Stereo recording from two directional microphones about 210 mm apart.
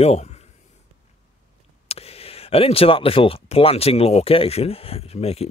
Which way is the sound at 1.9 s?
30° left (ahead or behind).